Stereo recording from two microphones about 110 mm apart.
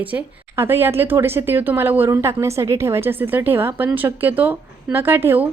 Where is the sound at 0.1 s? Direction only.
20° right (ahead or behind).